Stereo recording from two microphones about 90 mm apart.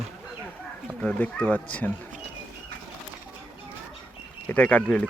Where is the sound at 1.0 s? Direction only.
15° left (ahead or behind).